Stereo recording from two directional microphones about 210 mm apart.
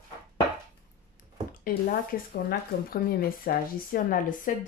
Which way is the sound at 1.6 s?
40° left (ahead or behind).